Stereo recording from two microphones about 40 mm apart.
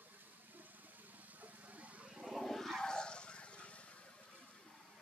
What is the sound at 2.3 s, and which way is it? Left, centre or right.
Vehicle, centre.